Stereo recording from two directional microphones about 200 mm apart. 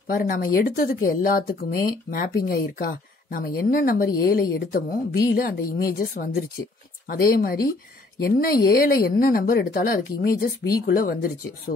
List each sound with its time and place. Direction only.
0.1 s speech: 45° left (ahead or behind)